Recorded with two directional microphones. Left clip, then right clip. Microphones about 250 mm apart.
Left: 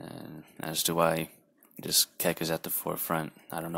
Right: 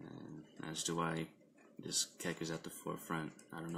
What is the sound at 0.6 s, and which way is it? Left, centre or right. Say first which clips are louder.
Speech: left 13 dB; left.